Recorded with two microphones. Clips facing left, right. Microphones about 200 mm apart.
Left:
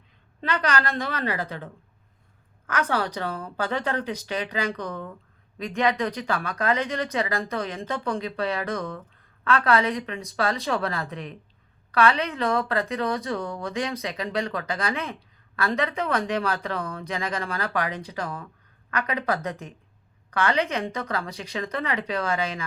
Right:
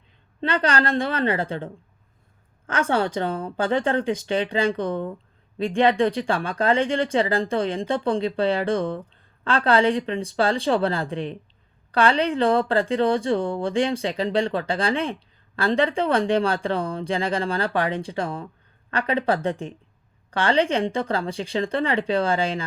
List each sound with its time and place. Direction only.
0.4 s speech: 30° right (ahead or behind)